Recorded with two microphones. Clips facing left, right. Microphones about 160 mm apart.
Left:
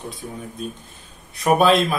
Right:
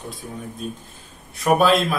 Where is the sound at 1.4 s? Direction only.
Centre (ahead or behind).